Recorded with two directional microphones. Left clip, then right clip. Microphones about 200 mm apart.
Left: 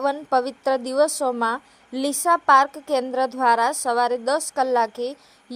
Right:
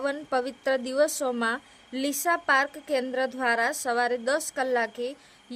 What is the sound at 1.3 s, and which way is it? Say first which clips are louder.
Speech: left 5 dB; 5° right (ahead or behind).